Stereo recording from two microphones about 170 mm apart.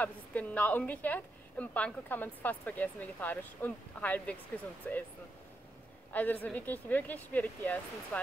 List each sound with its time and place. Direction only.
0.0 s a woman's voice: 10° left (ahead or behind)
6.1 s a woman's voice: 10° left (ahead or behind)